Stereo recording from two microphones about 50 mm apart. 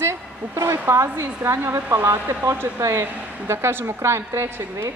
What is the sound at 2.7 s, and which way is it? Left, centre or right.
Speech, right.